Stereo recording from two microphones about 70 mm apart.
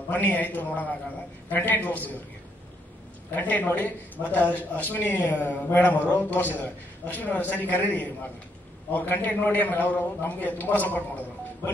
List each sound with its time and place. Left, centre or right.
0.1 s a man's voice: left
3.3 s a man's voice: left